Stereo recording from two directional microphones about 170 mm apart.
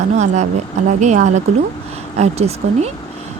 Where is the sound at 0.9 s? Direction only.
45° right (ahead or behind).